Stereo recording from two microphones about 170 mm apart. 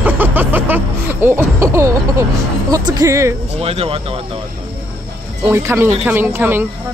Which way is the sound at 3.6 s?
35° right (ahead or behind).